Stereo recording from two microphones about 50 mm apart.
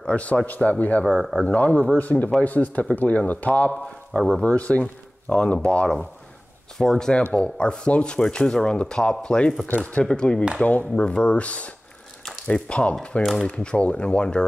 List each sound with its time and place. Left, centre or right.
0.0 s speech: left
6.8 s speech: centre
10.6 s speech: left
13.2 s speech: centre
13.5 s speech: left